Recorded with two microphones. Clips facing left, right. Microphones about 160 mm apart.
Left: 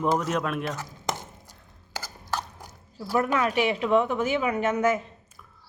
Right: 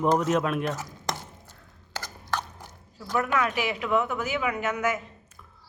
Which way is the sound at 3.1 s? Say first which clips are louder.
Left 2 dB; 35° left (ahead or behind).